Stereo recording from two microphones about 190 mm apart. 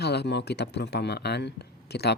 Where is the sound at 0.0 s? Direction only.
60° left (ahead or behind).